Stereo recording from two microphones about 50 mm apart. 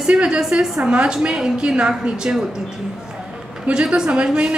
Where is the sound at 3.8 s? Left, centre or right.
Centre.